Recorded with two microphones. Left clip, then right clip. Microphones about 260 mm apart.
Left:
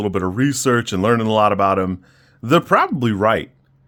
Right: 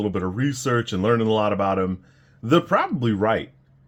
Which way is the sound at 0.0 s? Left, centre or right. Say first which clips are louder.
Left 5 dB; left.